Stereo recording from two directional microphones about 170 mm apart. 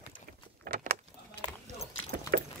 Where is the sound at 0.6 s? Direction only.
60° right (ahead or behind).